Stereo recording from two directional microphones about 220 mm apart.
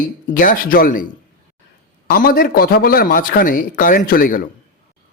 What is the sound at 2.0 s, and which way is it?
A man's voice, 40° left (ahead or behind).